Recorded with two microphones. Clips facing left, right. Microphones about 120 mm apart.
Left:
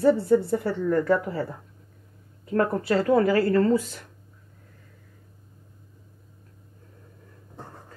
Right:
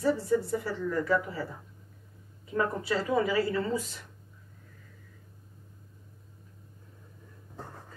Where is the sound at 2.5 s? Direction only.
60° left (ahead or behind).